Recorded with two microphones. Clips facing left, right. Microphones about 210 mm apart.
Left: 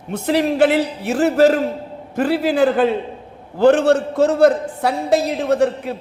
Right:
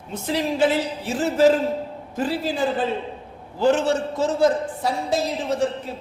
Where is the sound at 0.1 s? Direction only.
65° left (ahead or behind).